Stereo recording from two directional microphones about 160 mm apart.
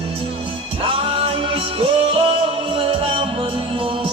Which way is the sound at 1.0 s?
35° right (ahead or behind).